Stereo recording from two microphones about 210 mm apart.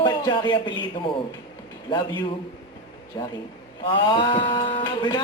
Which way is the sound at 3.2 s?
20° left (ahead or behind).